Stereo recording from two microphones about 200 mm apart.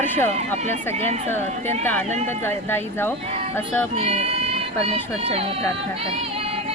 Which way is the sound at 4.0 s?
30° right (ahead or behind).